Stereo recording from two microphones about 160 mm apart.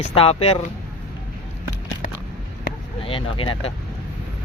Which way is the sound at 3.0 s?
35° left (ahead or behind).